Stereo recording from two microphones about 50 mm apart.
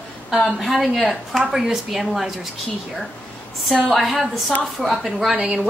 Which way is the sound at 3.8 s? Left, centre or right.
Centre.